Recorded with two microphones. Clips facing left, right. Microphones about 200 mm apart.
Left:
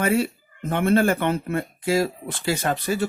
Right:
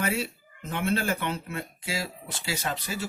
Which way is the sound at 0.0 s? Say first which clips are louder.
Left 8 dB; 55° left (ahead or behind).